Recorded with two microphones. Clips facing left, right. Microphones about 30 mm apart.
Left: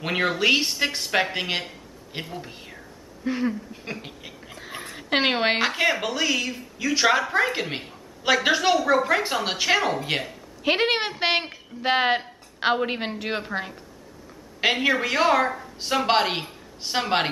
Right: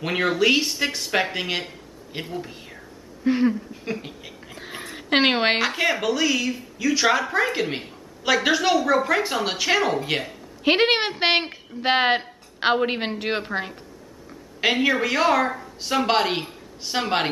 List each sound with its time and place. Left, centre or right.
0.0 s a woman's voice: centre
3.3 s speech: centre
3.8 s speech: centre
4.6 s a sound: centre
5.6 s a woman's voice: centre
10.6 s speech: centre
14.6 s a woman's voice: centre